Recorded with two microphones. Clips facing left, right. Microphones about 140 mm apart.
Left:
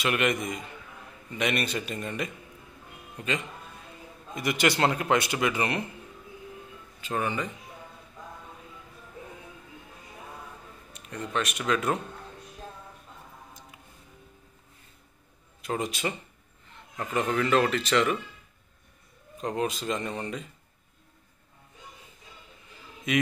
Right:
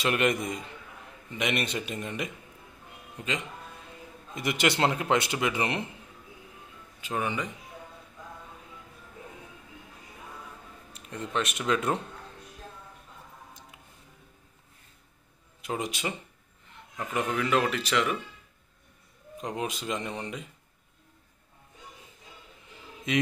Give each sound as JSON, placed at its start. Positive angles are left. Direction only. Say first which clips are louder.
{"t": 0.0, "sound": "a man's voice", "louder": "right 1 dB", "side_deg": -30}
{"t": 1.4, "sound": "speech", "louder": "left 1 dB", "side_deg": -20}
{"t": 4.4, "sound": "speech", "louder": "left 1 dB", "side_deg": -20}
{"t": 7.0, "sound": "speech", "louder": "left 1 dB", "side_deg": -15}
{"t": 10.9, "sound": "a man's voice", "louder": "left 1 dB", "side_deg": -25}
{"t": 15.6, "sound": "speech", "louder": "left 2 dB", "side_deg": -15}
{"t": 19.4, "sound": "speech", "louder": "left 4 dB", "side_deg": -15}
{"t": 23.1, "sound": "speech", "louder": "left 1 dB", "side_deg": -25}